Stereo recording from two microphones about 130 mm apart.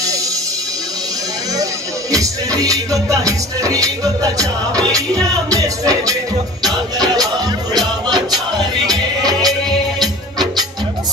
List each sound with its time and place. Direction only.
2.1 s music: 25° right (ahead or behind)
8.8 s music: 30° right (ahead or behind)